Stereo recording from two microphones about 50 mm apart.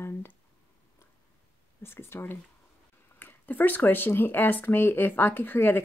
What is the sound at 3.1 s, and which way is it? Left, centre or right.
Speech, left.